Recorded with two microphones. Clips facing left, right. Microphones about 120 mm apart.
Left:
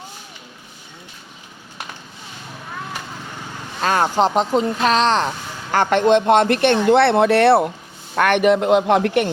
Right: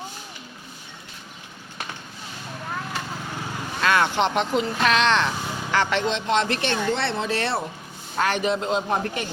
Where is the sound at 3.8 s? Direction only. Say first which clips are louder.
Left 4 dB; 35° left (ahead or behind).